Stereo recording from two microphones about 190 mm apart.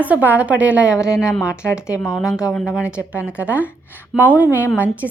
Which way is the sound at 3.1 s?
5° right (ahead or behind).